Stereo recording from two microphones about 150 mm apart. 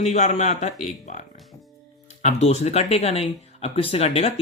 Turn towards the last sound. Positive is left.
turn(degrees=45)  # may be behind; listen again after turning